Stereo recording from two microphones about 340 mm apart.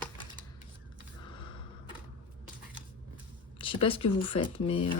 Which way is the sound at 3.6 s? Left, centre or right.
Centre.